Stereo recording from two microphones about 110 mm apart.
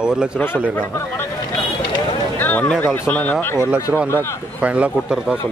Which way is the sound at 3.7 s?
15° right (ahead or behind).